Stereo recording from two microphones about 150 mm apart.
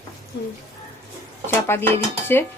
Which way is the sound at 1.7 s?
15° left (ahead or behind).